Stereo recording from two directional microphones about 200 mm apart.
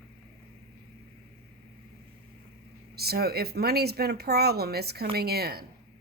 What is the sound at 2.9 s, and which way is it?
Speech, 50° right (ahead or behind).